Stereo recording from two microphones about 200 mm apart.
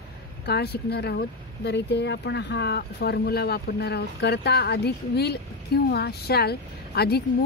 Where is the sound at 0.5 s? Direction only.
55° left (ahead or behind).